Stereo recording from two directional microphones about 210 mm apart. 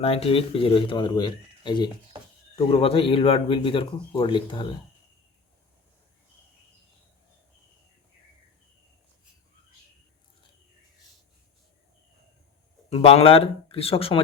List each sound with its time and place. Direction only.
0.0 s speech: 30° left (ahead or behind)
12.9 s speech: 30° left (ahead or behind)